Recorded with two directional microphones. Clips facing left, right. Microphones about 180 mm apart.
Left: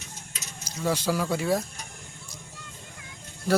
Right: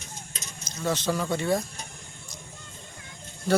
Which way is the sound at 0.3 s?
10° left (ahead or behind).